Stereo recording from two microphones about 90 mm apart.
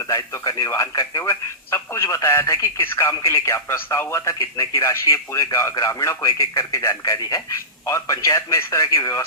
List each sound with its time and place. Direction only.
0.1 s speech: 40° left (ahead or behind)